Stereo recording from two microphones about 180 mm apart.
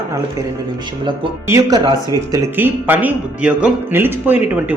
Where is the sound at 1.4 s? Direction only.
20° right (ahead or behind).